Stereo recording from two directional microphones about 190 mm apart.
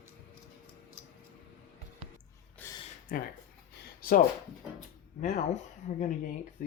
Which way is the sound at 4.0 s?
50° left (ahead or behind).